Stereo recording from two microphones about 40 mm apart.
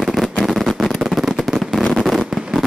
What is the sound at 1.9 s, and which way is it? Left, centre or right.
Fireworks, centre.